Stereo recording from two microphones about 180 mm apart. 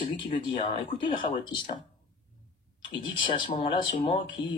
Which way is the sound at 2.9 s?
25° left (ahead or behind).